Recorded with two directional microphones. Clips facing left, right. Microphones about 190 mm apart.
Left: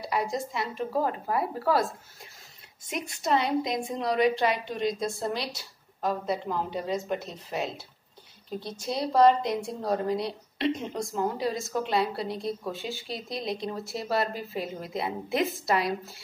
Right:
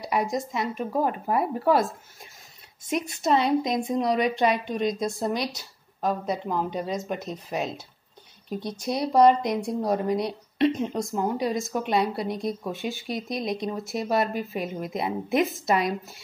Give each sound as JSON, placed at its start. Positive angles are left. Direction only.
{"t": 0.0, "sound": "a woman's voice", "side_deg": -15}
{"t": 2.9, "sound": "a woman's voice", "side_deg": -25}